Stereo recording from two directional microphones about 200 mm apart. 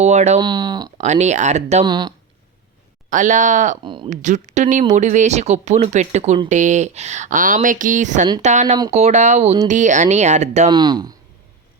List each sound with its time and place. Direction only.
0.0 s speech: 35° right (ahead or behind)
0.3 s speech: 20° right (ahead or behind)
0.9 s speech: 35° right (ahead or behind)
1.8 s speech: 20° right (ahead or behind)
3.1 s speech: 40° right (ahead or behind)
3.8 s speech: 25° right (ahead or behind)
4.1 s speech: 35° right (ahead or behind)
10.7 s speech: 20° right (ahead or behind)